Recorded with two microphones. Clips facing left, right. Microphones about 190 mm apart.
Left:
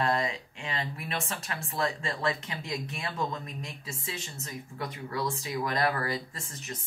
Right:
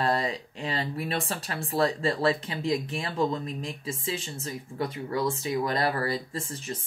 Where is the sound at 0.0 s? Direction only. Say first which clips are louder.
Right 2 dB; 35° right (ahead or behind).